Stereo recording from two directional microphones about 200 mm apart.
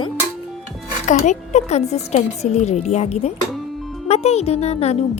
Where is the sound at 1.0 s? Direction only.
35° left (ahead or behind).